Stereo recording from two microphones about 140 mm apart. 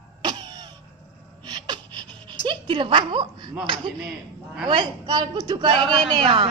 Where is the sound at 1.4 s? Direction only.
30° right (ahead or behind).